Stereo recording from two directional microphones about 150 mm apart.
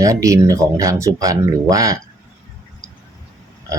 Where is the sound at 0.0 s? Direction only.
20° right (ahead or behind).